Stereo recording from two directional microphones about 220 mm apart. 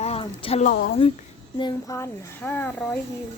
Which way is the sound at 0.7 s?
45° left (ahead or behind).